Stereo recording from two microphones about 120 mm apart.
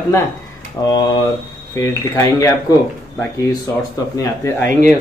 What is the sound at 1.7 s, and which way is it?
Speech, 25° left (ahead or behind).